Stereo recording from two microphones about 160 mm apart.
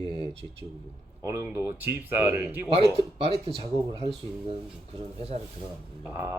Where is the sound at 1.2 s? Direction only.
15° right (ahead or behind).